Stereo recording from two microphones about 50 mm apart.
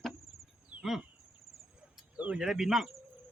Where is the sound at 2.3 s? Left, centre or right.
Centre.